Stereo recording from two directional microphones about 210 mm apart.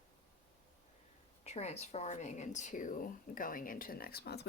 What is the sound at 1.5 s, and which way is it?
Speech, 30° left (ahead or behind).